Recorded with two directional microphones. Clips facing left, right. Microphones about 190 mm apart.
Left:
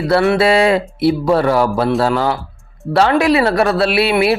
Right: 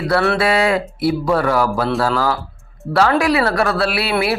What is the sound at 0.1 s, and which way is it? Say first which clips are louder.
A man's voice: left 4 dB; 20° left (ahead or behind).